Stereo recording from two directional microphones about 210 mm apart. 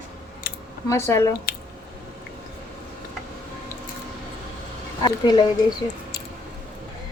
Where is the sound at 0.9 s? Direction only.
15° left (ahead or behind).